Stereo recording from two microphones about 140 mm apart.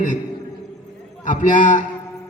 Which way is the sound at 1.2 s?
70° left (ahead or behind).